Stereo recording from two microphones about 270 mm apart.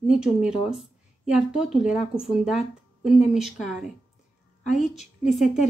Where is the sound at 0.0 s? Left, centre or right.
Centre.